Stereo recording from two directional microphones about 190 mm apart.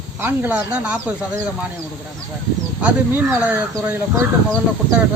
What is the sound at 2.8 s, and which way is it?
Speech, 10° right (ahead or behind).